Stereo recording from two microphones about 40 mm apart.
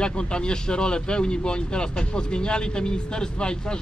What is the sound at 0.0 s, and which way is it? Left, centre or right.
Speech, left.